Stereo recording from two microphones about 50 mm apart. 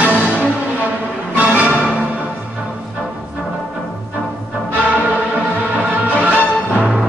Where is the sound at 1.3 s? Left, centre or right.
Right.